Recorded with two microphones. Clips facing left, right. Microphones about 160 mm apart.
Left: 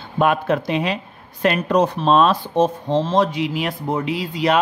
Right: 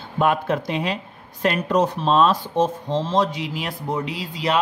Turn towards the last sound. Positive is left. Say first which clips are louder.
# left 5 dB
turn(degrees=55)  # may be behind; listen again after turning